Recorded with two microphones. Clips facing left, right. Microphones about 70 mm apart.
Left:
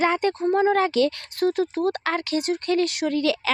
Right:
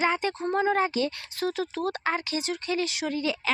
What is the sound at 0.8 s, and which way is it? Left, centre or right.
Speech, left.